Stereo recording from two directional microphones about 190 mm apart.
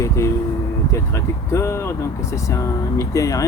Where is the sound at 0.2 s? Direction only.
15° left (ahead or behind).